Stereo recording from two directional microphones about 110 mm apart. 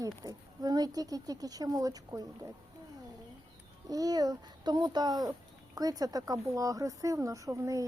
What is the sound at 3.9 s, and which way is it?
Speech, 35° right (ahead or behind).